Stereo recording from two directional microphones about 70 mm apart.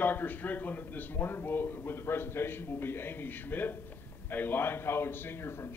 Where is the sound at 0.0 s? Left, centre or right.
Left.